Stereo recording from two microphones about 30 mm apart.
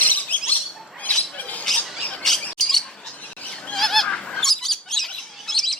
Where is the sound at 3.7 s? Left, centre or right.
Centre.